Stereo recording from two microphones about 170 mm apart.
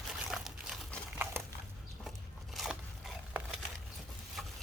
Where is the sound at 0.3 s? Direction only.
Centre (ahead or behind).